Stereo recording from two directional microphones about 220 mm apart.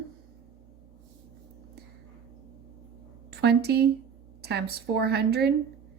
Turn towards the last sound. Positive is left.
turn(degrees=-45)  # may be behind; listen again after turning